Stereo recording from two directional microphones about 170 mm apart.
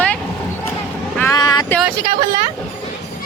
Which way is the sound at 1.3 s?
25° left (ahead or behind).